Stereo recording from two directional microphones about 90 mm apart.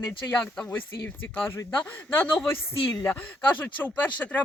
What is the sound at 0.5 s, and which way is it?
Speech, 15° left (ahead or behind).